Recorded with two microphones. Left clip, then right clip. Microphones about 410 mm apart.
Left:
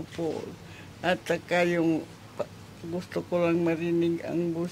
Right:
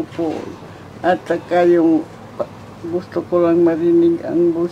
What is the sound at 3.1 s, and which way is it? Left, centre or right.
Speech, left.